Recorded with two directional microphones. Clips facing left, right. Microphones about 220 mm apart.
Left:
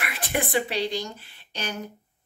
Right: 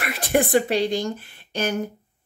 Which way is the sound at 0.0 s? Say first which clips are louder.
Right 7 dB; 40° right (ahead or behind).